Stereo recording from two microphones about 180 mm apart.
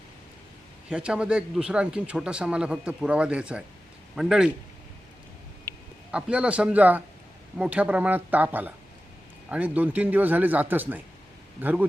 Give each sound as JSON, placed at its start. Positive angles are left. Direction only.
{"t": 0.9, "sound": "a man's voice", "side_deg": -5}
{"t": 5.7, "sound": "a sound", "side_deg": -20}
{"t": 6.1, "sound": "speech", "side_deg": -5}